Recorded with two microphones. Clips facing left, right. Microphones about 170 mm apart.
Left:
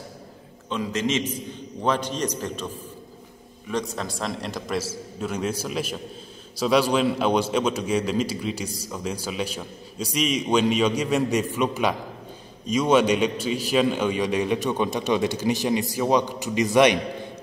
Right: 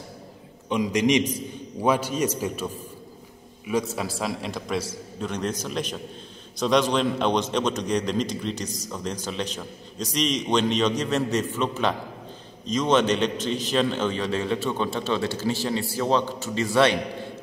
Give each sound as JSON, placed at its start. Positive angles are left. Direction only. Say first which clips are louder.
{"t": 0.7, "sound": "a man's voice", "louder": "right 4 dB", "side_deg": -15}